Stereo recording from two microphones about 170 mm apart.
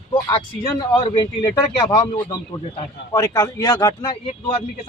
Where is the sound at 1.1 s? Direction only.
25° left (ahead or behind).